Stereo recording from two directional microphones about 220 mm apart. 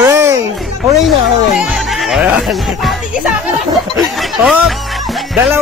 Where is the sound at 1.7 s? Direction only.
Centre (ahead or behind).